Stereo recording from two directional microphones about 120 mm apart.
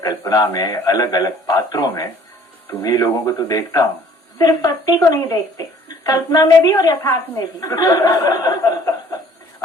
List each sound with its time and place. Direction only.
0.0 s a man's voice: 30° left (ahead or behind)